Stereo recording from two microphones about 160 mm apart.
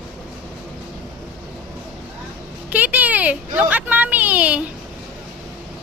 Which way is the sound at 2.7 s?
10° right (ahead or behind).